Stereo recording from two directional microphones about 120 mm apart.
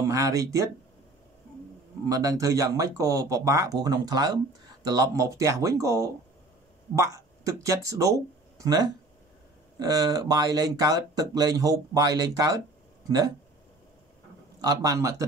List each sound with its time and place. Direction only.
0.0 s speech: 25° right (ahead or behind)
2.0 s speech: 30° right (ahead or behind)
14.6 s speech: 30° right (ahead or behind)